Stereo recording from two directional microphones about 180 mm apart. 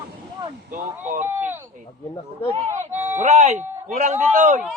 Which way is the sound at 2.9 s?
10° right (ahead or behind).